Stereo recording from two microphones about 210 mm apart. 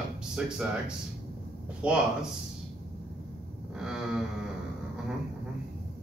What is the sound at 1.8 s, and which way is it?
Speech, 5° right (ahead or behind).